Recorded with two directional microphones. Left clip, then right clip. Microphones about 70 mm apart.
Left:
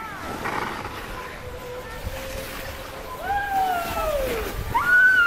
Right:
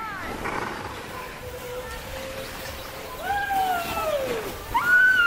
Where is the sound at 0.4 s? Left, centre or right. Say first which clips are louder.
Left 3 dB; left.